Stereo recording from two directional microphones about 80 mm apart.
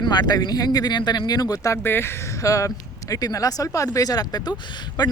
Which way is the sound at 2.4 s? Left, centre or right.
Left.